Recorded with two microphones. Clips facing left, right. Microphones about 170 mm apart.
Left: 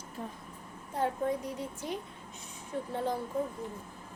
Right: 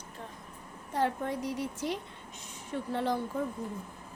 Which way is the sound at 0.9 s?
80° right.